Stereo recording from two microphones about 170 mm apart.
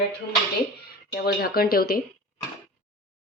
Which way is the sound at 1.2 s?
60° left (ahead or behind).